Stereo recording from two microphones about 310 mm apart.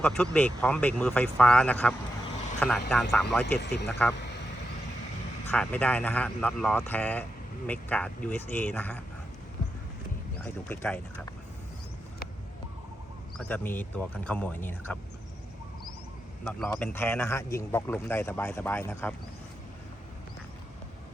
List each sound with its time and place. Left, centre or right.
0.0 s speech: centre
3.6 s speech: left
5.5 s speech: centre
10.3 s speech: centre
13.5 s speech: centre
16.4 s a man's voice: centre